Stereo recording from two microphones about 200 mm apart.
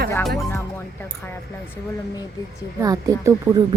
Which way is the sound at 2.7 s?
15° right (ahead or behind).